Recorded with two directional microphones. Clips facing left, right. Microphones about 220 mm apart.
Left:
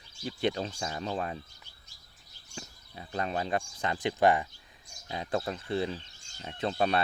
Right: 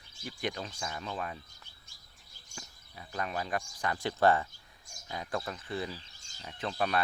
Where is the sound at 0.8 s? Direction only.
30° left (ahead or behind).